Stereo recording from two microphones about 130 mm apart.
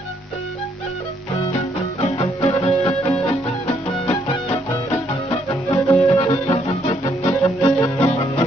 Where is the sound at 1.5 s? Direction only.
50° left (ahead or behind).